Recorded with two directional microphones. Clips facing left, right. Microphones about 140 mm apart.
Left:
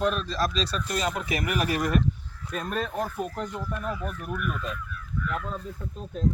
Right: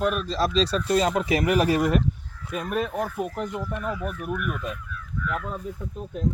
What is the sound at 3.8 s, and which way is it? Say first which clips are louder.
Speech: right 2 dB; 70° right (ahead or behind).